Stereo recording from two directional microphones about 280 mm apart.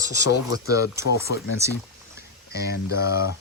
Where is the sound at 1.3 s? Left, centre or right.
Left.